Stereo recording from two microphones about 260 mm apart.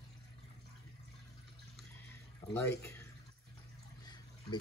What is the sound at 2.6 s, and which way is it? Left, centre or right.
Speech, centre.